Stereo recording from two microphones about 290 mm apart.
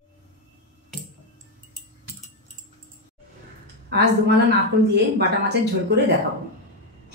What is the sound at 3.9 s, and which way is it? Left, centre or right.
A woman's voice, right.